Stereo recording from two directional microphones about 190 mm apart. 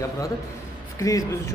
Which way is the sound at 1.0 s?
15° left (ahead or behind).